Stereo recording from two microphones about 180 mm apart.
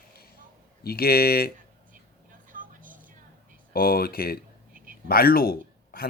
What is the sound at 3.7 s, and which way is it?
Speech, 55° left (ahead or behind).